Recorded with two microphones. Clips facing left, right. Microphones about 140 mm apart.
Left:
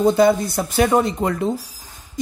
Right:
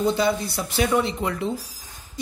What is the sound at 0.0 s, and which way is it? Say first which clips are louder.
Speech: left 7 dB; 50° left (ahead or behind).